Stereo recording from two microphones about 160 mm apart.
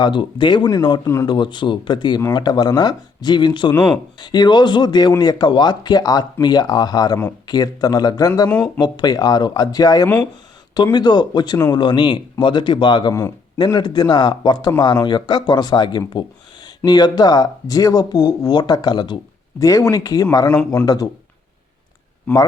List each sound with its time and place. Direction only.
0.0 s speech: 30° left (ahead or behind)
8.4 s speech: 10° left (ahead or behind)
8.8 s speech: 25° left (ahead or behind)